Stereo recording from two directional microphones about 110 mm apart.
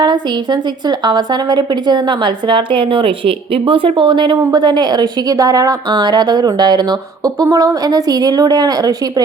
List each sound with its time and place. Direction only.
0.0 s a woman's voice: 40° right (ahead or behind)